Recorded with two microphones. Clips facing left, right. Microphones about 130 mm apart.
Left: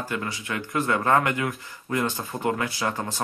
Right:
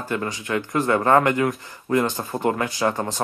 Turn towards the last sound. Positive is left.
turn(degrees=-40)  # may be behind; listen again after turning